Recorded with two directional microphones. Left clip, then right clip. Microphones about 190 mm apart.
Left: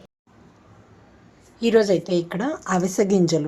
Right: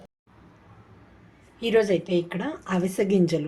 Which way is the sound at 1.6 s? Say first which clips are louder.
Left 4 dB; 20° left (ahead or behind).